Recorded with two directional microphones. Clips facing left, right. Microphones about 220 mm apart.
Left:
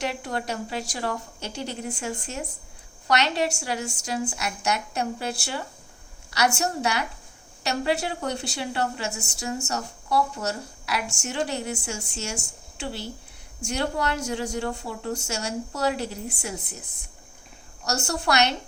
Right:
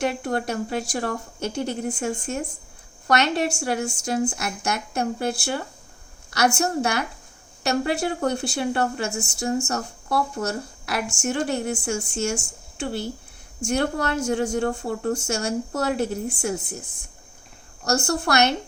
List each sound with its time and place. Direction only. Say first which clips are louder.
0.0 s a woman's voice: right 5 dB; 50° right (ahead or behind)
17.8 s a woman's voice: right 4 dB; 50° right (ahead or behind)